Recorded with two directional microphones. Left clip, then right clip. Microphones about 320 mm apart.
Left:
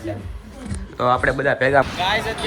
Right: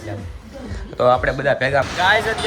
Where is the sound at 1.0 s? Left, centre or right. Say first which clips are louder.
Right 2 dB; centre.